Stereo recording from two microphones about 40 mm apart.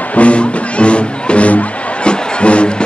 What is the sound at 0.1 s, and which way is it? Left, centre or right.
Music, left.